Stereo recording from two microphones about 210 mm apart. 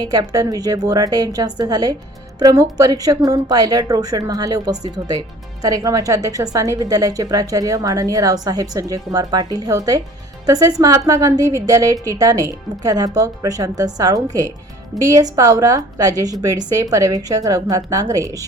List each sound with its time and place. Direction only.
0.0 s a woman's voice: 20° right (ahead or behind)